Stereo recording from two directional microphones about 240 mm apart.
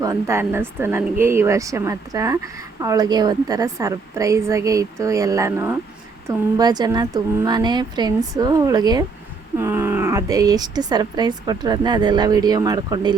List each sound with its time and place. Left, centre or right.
0.0 s speech: centre